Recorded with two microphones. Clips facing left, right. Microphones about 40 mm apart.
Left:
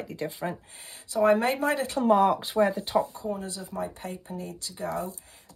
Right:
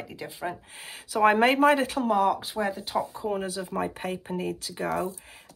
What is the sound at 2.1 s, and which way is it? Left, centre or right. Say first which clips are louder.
Speech: left 4 dB; left.